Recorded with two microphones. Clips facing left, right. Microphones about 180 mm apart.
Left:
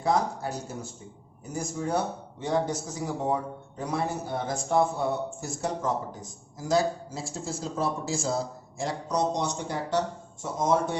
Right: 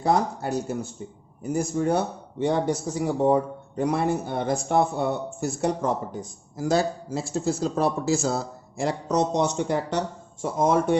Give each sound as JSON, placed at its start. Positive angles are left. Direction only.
{"t": 0.0, "sound": "a man's voice", "side_deg": -65}